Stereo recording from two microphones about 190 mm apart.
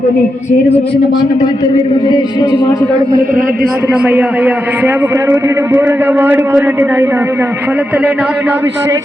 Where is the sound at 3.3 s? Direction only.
45° right (ahead or behind).